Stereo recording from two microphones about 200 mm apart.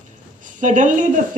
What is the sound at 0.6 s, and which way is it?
Speech, 40° right (ahead or behind).